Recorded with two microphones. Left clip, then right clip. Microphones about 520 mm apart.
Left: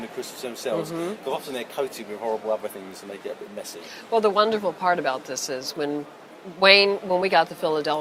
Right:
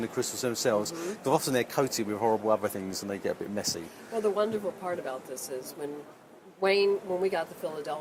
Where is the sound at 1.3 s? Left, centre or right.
Right.